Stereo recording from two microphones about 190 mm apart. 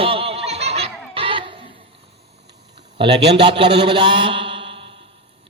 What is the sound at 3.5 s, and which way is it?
Mantra, 25° right (ahead or behind).